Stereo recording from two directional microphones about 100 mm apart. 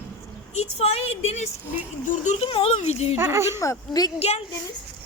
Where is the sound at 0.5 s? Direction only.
90° left.